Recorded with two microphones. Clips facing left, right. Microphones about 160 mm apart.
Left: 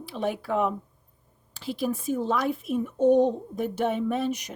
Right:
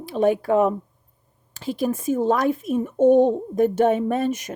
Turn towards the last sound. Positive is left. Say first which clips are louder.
# right 4 dB
turn(degrees=-50)  # may be behind; listen again after turning